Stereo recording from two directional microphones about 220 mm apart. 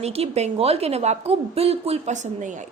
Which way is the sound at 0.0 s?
30° right (ahead or behind).